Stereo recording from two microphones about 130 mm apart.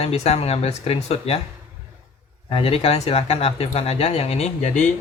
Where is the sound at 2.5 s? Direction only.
45° left (ahead or behind).